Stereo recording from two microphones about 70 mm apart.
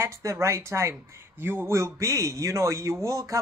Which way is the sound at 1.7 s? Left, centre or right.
Right.